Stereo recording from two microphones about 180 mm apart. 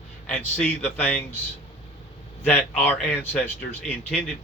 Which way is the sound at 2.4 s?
10° left (ahead or behind).